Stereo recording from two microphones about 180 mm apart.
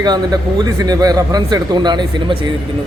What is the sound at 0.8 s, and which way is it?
A man's voice, 20° right (ahead or behind).